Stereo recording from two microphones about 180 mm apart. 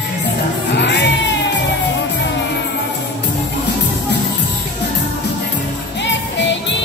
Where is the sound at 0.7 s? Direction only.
70° left (ahead or behind).